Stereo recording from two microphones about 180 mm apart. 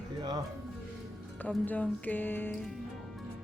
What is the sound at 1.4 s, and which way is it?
Speech, 10° left (ahead or behind).